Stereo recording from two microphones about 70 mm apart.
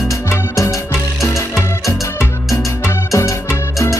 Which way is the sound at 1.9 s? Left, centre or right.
Left.